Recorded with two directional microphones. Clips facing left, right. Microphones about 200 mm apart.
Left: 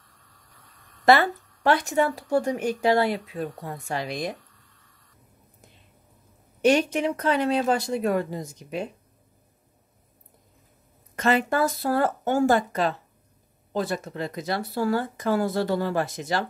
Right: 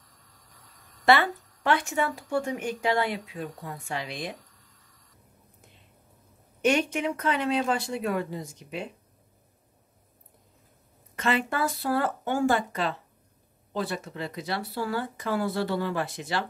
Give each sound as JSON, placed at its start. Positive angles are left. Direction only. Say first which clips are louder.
{"t": 1.0, "sound": "a woman's voice", "louder": "left 3 dB", "side_deg": 40}
{"t": 6.6, "sound": "a woman's voice", "louder": "left 4 dB", "side_deg": 35}
{"t": 11.1, "sound": "a woman's voice", "louder": "left 5 dB", "side_deg": 40}